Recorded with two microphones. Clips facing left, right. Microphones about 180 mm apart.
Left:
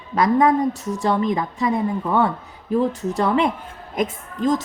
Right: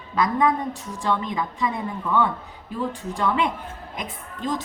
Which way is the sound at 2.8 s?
40° left (ahead or behind).